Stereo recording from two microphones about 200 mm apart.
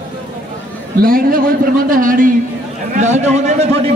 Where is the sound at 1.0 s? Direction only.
45° right (ahead or behind).